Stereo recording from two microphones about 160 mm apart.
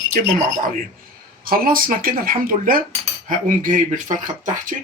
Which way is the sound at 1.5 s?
65° right (ahead or behind).